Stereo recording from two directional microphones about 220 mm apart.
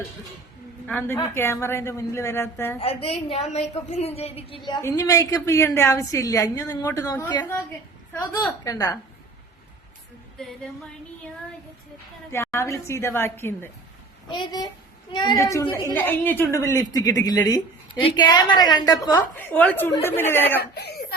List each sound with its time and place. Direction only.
0.9 s a woman's voice: 10° left (ahead or behind)
2.8 s a woman's voice: 25° left (ahead or behind)
12.3 s a woman's voice: 15° left (ahead or behind)
14.3 s a woman's voice: 20° left (ahead or behind)
20.6 s speech: 45° left (ahead or behind)